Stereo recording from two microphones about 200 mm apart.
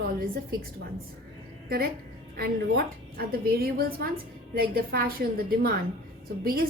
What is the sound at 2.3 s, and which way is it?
A woman's voice, 50° right (ahead or behind).